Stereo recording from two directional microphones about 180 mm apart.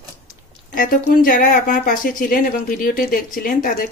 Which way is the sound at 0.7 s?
50° left (ahead or behind).